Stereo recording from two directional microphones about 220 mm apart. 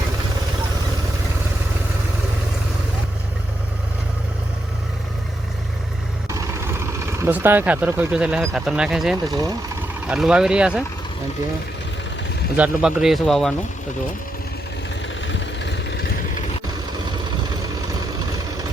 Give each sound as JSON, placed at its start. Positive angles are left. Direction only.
{"t": 6.2, "sound": "speech", "side_deg": -15}
{"t": 12.5, "sound": "speech", "side_deg": -5}
{"t": 15.3, "sound": "vehicle", "side_deg": 55}